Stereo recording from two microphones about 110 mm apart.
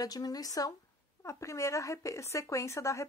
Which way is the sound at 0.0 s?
35° left (ahead or behind).